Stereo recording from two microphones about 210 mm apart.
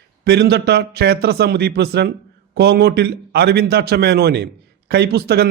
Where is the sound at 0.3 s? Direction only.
50° right (ahead or behind).